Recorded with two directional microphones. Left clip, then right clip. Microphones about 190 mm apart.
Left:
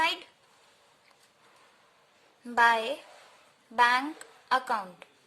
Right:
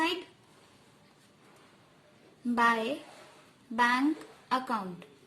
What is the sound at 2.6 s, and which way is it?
A woman's voice, 30° left (ahead or behind).